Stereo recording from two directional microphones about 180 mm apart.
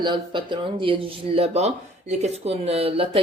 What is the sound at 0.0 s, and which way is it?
A woman's voice, 25° right (ahead or behind).